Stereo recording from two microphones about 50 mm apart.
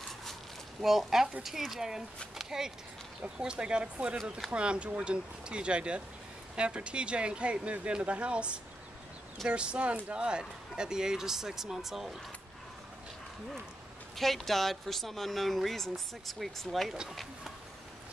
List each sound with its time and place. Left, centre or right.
0.7 s speech: centre
14.1 s speech: centre